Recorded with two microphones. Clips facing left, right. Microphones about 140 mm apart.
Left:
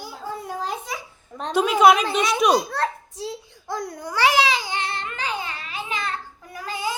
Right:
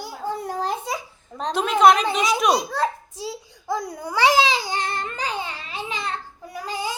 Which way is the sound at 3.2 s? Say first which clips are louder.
Right 3 dB; centre (ahead or behind).